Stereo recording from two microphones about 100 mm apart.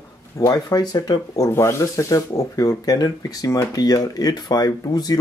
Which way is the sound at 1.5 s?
25° left (ahead or behind).